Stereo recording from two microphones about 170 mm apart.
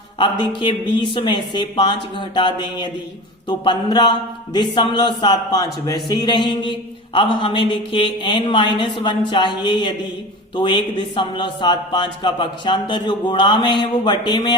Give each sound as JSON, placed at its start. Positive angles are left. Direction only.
{"t": 0.2, "sound": "a man's voice", "side_deg": 30}